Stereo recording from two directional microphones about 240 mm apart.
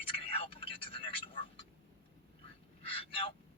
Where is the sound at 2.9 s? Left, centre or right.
Left.